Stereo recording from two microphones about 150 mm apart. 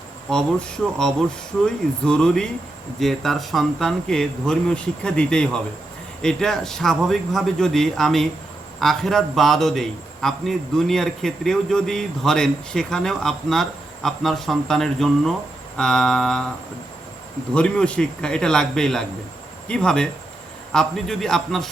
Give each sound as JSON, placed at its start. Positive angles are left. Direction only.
{"t": 1.6, "sound": "a man's voice", "side_deg": 5}
{"t": 17.5, "sound": "a man's voice", "side_deg": 5}